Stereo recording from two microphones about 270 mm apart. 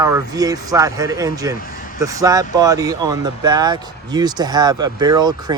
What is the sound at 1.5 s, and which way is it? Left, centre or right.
Speech, left.